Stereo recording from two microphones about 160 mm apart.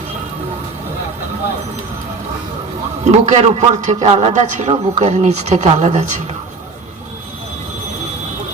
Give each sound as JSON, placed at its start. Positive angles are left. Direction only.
{"t": 3.0, "sound": "a man's voice", "side_deg": -45}